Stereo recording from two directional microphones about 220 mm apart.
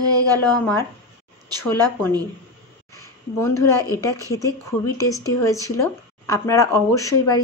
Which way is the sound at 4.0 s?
15° left (ahead or behind).